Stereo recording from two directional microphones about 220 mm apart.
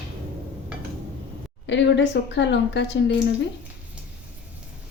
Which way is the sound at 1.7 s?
55° left (ahead or behind).